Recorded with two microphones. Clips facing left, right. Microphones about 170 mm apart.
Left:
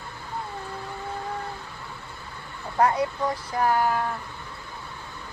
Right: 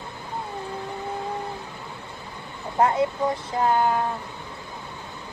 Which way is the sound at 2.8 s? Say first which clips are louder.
Right 2 dB; 25° right (ahead or behind).